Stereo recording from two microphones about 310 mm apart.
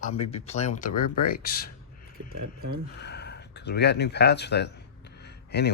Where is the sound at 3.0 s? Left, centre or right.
Left.